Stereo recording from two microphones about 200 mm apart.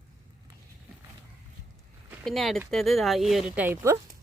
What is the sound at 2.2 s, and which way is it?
Speech, centre (ahead or behind).